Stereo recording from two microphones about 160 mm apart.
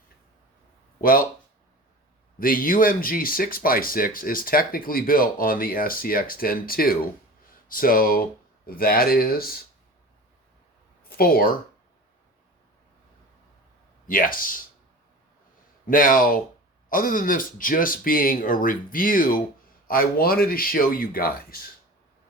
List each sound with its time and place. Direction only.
2.4 s speech: 65° left (ahead or behind)
11.1 s speech: 70° left (ahead or behind)
14.1 s speech: 60° left (ahead or behind)
15.9 s speech: 60° left (ahead or behind)